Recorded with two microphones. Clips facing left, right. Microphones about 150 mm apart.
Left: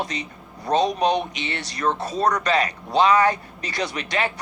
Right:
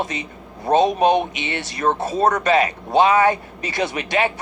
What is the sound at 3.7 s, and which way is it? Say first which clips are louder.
Speech: right 4 dB; 25° right (ahead or behind).